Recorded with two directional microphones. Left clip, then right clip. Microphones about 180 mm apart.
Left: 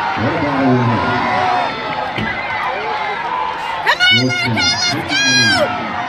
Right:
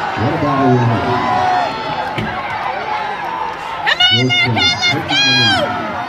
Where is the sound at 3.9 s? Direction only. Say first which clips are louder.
Even; 30° left (ahead or behind).